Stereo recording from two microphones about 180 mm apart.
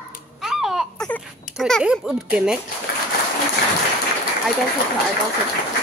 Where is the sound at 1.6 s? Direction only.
5° right (ahead or behind).